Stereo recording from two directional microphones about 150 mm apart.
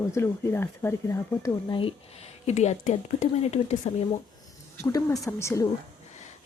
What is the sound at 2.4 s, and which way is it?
Speech, 50° left (ahead or behind).